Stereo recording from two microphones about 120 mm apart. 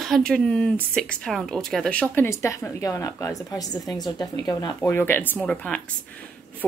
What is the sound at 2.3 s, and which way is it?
A woman's voice, 20° left (ahead or behind).